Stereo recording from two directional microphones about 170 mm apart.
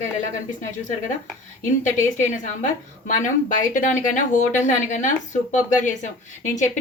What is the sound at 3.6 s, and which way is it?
Speech, 50° left (ahead or behind).